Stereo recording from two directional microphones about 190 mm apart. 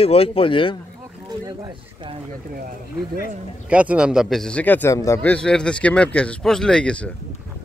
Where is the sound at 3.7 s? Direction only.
5° right (ahead or behind).